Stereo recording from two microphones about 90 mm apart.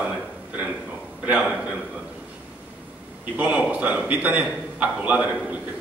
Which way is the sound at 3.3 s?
15° right (ahead or behind).